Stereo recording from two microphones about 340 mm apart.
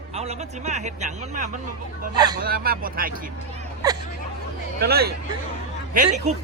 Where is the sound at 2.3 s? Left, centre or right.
Right.